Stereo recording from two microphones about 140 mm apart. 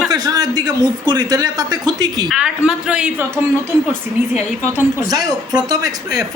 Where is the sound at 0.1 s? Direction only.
25° right (ahead or behind).